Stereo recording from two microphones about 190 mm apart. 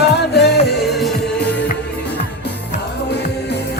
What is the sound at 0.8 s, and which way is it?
Music, centre (ahead or behind).